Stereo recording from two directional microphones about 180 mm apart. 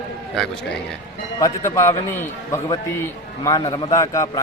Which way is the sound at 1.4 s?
15° left (ahead or behind).